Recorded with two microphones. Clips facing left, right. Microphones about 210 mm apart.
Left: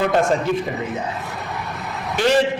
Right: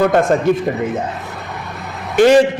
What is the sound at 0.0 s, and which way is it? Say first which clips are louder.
Speech: right 5 dB; 50° right (ahead or behind).